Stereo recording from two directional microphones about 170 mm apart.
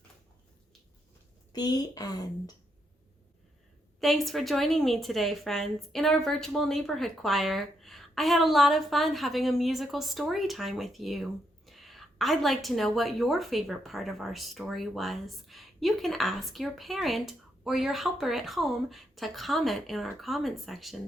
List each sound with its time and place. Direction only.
1.5 s a woman's voice: 25° left (ahead or behind)
4.0 s a woman's voice: centre (ahead or behind)